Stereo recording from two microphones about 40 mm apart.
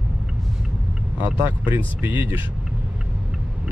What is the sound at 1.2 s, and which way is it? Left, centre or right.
Speech, right.